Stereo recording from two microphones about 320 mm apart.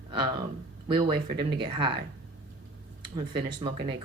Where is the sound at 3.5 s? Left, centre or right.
Centre.